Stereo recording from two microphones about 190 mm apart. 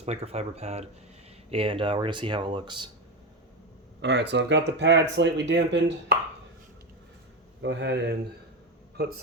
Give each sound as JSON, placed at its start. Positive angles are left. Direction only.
{"t": 0.0, "sound": "speech", "side_deg": -35}
{"t": 4.0, "sound": "speech", "side_deg": -65}
{"t": 7.6, "sound": "speech", "side_deg": -65}